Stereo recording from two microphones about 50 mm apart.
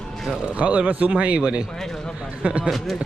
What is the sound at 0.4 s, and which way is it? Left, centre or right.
Speech, right.